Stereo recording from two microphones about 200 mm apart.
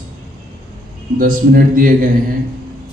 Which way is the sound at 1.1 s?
45° right (ahead or behind).